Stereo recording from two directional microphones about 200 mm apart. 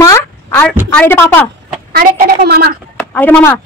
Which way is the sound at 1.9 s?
50° right (ahead or behind).